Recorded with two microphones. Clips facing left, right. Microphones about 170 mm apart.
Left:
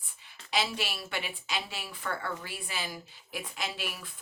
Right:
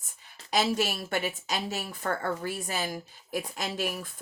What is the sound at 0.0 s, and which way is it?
Speech, 45° right (ahead or behind).